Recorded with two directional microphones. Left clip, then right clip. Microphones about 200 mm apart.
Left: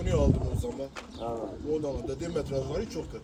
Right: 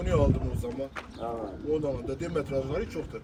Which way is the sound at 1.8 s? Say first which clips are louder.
Right 1 dB; centre (ahead or behind).